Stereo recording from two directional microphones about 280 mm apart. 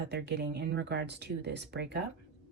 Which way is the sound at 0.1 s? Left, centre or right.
Right.